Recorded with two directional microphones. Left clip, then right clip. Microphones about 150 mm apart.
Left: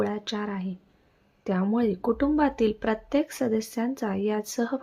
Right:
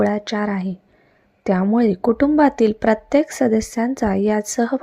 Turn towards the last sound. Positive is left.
turn(degrees=-40)  # may be behind; listen again after turning